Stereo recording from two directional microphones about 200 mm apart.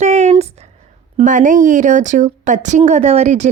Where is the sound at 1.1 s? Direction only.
40° right (ahead or behind).